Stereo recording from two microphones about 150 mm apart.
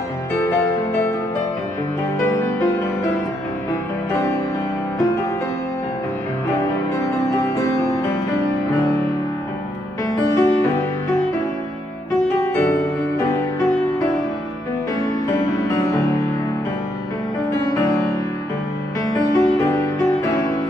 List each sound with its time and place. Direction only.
7.5 s music: 20° left (ahead or behind)
10.3 s music: 20° left (ahead or behind)
19.0 s music: 20° left (ahead or behind)